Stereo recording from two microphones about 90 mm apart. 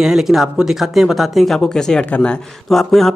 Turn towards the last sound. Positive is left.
turn(degrees=0)  # may be behind; listen again after turning